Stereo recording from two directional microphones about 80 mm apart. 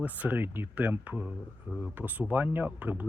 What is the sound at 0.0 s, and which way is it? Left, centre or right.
Speech, right.